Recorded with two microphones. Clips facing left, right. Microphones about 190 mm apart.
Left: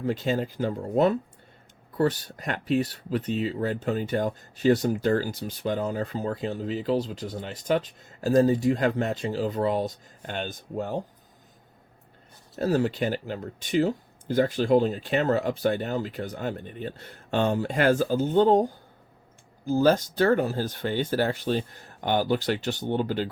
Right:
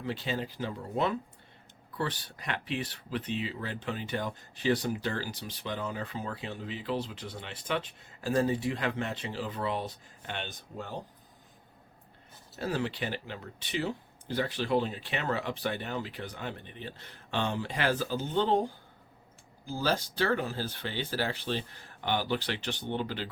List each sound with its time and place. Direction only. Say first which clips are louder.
0.0 s speech: left 8 dB; 45° left (ahead or behind)
12.5 s speech: left 8 dB; 45° left (ahead or behind)